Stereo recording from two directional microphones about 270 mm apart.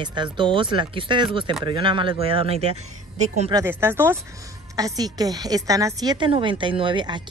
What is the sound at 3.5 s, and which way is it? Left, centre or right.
A woman's voice, centre.